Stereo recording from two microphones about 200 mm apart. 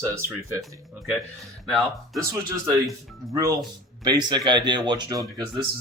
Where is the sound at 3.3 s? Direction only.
20° right (ahead or behind).